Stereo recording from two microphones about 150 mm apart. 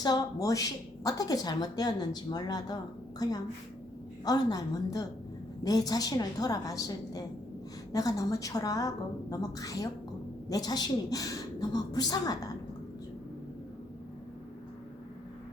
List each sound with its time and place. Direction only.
0.0 s a woman's voice: 25° left (ahead or behind)